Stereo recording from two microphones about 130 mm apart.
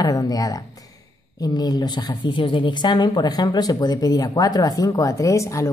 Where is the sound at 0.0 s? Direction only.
30° left (ahead or behind).